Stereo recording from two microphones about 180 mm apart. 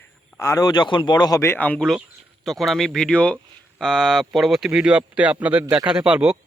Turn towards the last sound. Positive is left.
turn(degrees=-5)  # may be behind; listen again after turning